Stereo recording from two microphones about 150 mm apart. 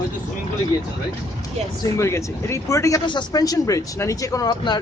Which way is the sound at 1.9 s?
20° left (ahead or behind).